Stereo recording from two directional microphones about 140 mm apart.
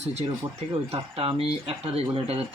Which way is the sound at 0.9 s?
45° right (ahead or behind).